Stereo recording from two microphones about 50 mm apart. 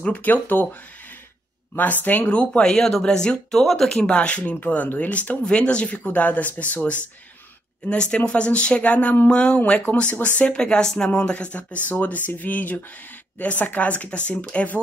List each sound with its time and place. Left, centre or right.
0.0 s speech: left
2.0 s speech: left
2.6 s speech: centre
4.0 s speech: left
4.6 s speech: left
5.4 s speech: left
7.8 s speech: centre; by 9.3 s left
9.3 s speech: left